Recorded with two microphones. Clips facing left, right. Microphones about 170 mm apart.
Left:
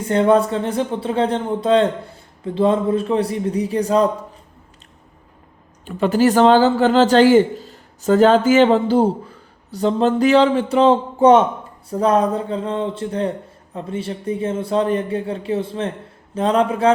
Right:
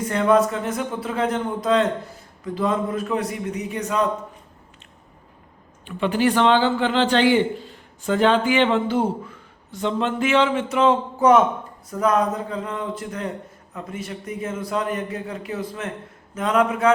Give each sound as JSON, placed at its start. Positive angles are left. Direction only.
{"t": 0.0, "sound": "speech", "side_deg": 30}
{"t": 5.9, "sound": "a man's voice", "side_deg": 40}